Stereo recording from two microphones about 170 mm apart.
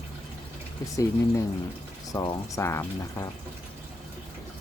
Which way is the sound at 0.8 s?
20° left (ahead or behind).